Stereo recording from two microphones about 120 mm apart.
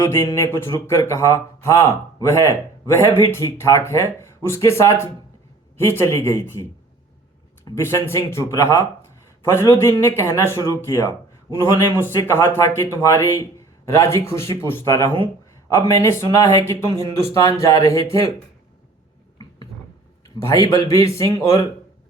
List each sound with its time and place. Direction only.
0.0 s speech: 20° left (ahead or behind)
7.6 s speech: 25° left (ahead or behind)
20.2 s speech: 25° left (ahead or behind)